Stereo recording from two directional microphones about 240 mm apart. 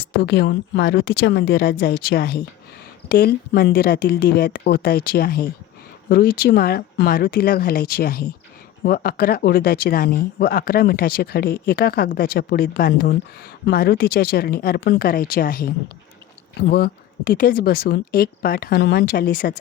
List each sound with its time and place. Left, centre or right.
0.2 s speech: left